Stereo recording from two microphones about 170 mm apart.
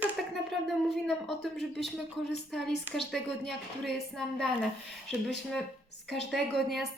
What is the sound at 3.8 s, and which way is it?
Speech, centre (ahead or behind).